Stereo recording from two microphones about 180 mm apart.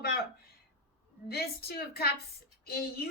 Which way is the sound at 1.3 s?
60° left (ahead or behind).